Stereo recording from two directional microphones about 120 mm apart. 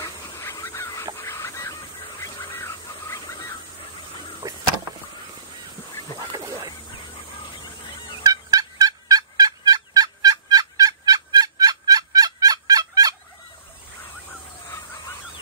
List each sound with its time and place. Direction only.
0.4 s crow: 20° left (ahead or behind)
1.1 s fowl: 25° left (ahead or behind)
4.4 s vehicle: 30° right (ahead or behind)
6.1 s a sound: 35° right (ahead or behind)
8.2 s fowl: 30° right (ahead or behind)